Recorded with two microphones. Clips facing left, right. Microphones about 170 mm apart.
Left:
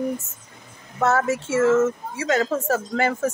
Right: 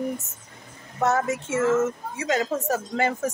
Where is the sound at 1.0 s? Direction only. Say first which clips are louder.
Left 2 dB; 15° right (ahead or behind).